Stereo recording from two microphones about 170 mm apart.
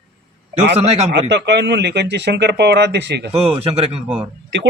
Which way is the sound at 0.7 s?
40° right (ahead or behind).